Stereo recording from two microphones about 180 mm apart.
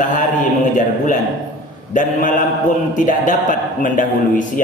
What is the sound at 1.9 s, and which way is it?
A man's voice, 45° left (ahead or behind).